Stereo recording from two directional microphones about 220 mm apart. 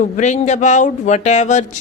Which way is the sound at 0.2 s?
30° left (ahead or behind).